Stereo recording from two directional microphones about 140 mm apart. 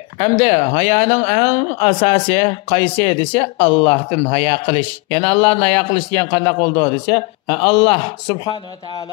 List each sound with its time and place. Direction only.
0.2 s a man's voice: 35° left (ahead or behind)
1.5 s speech: 30° left (ahead or behind)
1.8 s a man's voice: 45° left (ahead or behind)